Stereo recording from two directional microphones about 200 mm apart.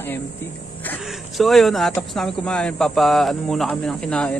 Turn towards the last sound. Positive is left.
turn(degrees=5)  # may be behind; listen again after turning